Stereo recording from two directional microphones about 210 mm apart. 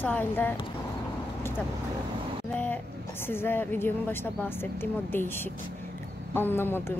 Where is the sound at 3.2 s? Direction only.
10° left (ahead or behind).